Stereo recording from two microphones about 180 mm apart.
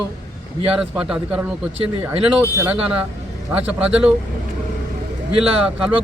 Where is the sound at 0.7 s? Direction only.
5° right (ahead or behind).